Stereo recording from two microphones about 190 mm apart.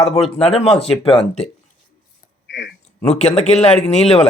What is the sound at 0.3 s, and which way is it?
Speech, 30° left (ahead or behind).